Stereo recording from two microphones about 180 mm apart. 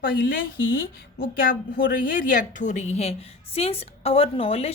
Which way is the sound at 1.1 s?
55° left (ahead or behind).